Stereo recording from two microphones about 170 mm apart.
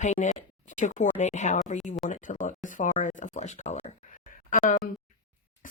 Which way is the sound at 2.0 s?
50° left (ahead or behind).